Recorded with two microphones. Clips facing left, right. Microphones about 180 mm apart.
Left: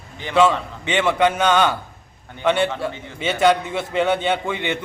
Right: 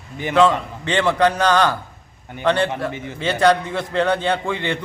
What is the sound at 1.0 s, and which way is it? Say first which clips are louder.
Speech: right 1 dB; 10° left (ahead or behind).